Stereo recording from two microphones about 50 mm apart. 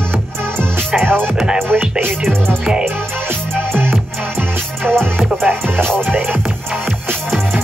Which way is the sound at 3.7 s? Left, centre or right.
Right.